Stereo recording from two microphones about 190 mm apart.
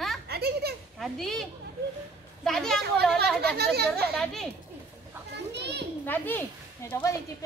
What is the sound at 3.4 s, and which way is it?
Speech, 55° right (ahead or behind).